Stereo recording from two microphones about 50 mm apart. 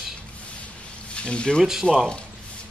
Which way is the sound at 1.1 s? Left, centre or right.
Left.